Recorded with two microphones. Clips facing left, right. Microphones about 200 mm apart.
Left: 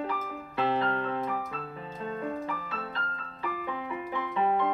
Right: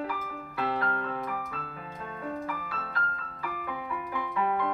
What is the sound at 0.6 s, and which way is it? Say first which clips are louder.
Music: left 3 dB; 25° left (ahead or behind).